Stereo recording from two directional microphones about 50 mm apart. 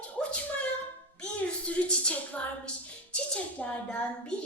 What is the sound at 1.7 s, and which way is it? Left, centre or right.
A woman's voice, left.